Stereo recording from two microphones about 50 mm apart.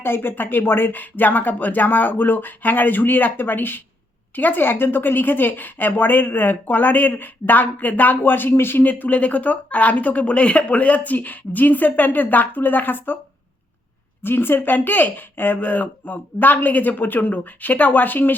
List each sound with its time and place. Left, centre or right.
0.0 s a woman's voice: left
8.8 s a woman's voice: left
14.2 s a woman's voice: left